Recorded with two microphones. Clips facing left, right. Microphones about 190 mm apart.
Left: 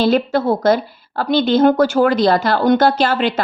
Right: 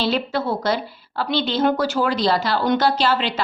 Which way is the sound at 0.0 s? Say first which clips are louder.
Left 7 dB; 50° left (ahead or behind).